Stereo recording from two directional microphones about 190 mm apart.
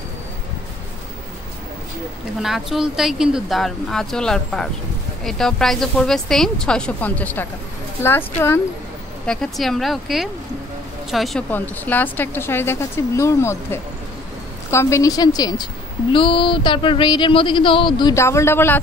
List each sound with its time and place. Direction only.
2.4 s speech: centre (ahead or behind)
9.2 s a woman's voice: 5° left (ahead or behind)